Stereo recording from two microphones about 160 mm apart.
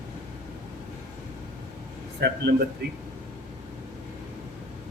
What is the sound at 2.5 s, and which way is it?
Speech, 90° right.